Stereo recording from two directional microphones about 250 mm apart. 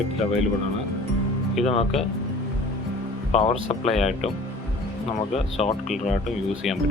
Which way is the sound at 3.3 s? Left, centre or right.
Left.